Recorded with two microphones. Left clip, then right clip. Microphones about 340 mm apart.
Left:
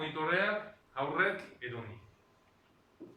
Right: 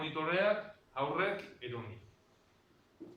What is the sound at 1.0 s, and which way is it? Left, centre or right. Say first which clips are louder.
Speech: left 2 dB; centre.